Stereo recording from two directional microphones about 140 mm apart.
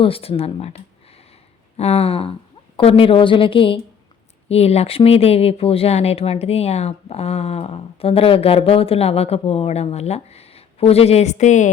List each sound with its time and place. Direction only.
0.0 s a woman's voice: 40° left (ahead or behind); by 11.7 s 60° left (ahead or behind)